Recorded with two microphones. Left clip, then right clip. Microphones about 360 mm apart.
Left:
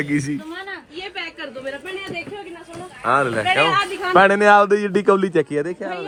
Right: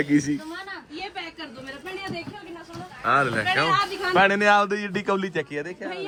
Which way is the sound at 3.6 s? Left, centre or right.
Centre.